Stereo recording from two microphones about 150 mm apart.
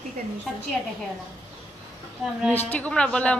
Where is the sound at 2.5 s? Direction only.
10° left (ahead or behind).